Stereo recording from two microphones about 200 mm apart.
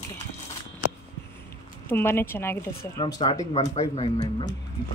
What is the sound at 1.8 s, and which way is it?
A woman's voice, 10° left (ahead or behind).